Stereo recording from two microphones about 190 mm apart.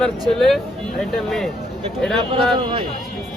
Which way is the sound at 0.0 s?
Centre (ahead or behind).